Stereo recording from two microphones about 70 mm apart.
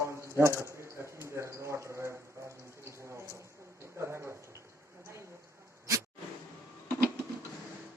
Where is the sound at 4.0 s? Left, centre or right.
Right.